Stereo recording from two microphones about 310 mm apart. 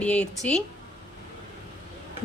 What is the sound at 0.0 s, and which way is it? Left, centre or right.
Speech, centre.